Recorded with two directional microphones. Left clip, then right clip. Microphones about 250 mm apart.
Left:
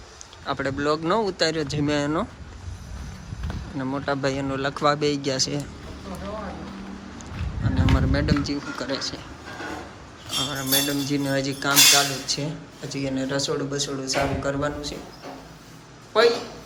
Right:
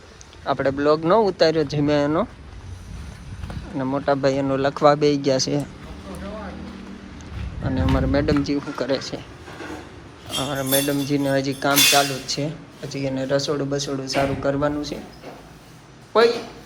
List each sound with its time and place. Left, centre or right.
0.4 s speech: centre
3.8 s speech: centre
7.6 s speech: centre
10.3 s speech: centre
16.1 s speech: centre